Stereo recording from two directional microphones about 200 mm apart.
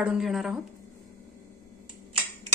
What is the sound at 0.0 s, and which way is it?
Speech, 5° right (ahead or behind).